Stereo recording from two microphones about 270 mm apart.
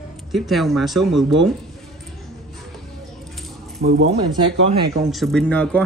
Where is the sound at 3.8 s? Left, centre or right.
Right.